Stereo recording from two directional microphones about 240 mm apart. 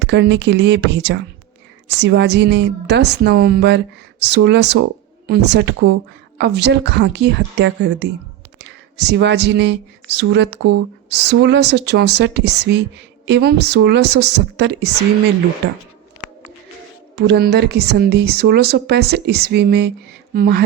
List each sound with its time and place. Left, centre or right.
0.0 s speech: right
17.2 s speech: right